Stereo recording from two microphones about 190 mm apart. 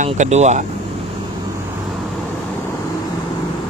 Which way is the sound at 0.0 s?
40° right (ahead or behind).